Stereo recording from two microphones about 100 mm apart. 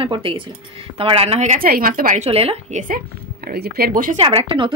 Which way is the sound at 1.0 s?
75° right (ahead or behind).